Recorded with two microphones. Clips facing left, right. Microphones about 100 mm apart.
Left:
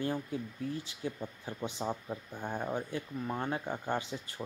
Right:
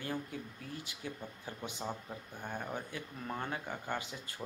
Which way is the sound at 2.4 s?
25° left (ahead or behind).